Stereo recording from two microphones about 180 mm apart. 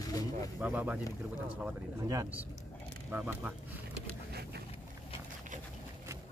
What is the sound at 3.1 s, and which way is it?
Speech, 5° right (ahead or behind).